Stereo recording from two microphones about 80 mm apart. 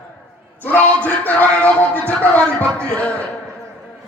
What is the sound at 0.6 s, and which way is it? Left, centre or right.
Music, left.